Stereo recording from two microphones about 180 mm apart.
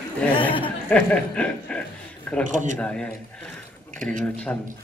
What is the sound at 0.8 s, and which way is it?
Speech, 5° left (ahead or behind).